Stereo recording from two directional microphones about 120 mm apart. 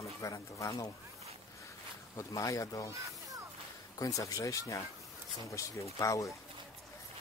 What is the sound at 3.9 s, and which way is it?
Speech, 30° left (ahead or behind).